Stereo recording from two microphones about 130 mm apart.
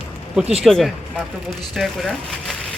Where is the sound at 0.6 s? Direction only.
Centre (ahead or behind).